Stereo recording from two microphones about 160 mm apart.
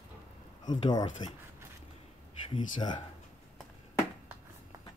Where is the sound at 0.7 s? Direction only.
25° left (ahead or behind).